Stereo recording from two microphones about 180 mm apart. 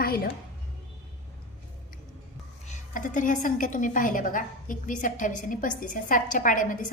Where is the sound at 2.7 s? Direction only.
45° left (ahead or behind).